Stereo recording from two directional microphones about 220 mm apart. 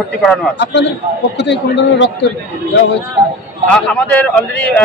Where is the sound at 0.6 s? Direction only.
55° left (ahead or behind).